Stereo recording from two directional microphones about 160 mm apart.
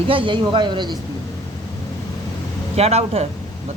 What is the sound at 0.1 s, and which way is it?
Speech, 30° right (ahead or behind).